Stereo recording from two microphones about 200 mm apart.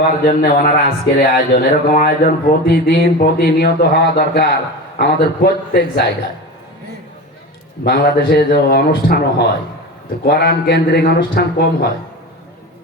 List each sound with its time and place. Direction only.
0.3 s speech: 45° left (ahead or behind)
7.9 s speech: 50° left (ahead or behind)